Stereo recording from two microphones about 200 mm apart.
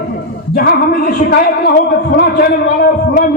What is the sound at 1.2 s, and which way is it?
A man's voice, 50° left (ahead or behind).